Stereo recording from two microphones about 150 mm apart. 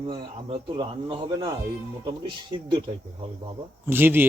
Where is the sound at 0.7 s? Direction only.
35° right (ahead or behind).